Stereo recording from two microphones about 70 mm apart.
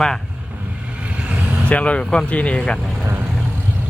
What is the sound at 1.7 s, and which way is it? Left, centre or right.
Speech, centre.